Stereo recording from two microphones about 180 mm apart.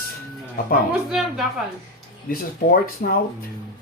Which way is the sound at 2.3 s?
55° left (ahead or behind).